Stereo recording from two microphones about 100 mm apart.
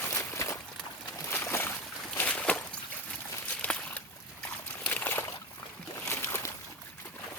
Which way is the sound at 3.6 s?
15° left (ahead or behind).